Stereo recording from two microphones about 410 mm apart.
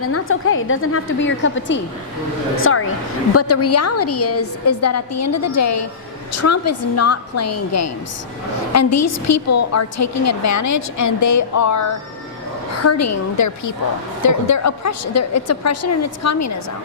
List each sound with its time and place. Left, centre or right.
0.0 s a woman's voice: left